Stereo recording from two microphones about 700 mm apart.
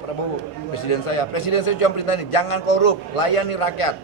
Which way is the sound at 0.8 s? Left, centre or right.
Left.